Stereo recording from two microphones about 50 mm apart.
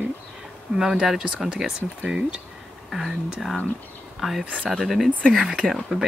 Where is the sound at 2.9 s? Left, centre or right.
Centre.